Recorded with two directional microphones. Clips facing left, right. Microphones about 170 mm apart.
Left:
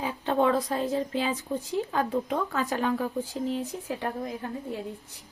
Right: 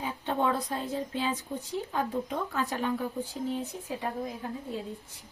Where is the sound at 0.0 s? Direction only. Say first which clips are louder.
Left 4 dB; 90° left.